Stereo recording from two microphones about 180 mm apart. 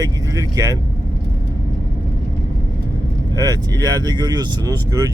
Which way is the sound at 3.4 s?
20° right (ahead or behind).